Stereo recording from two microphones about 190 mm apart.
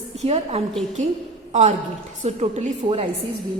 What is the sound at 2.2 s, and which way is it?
Speech, 35° right (ahead or behind).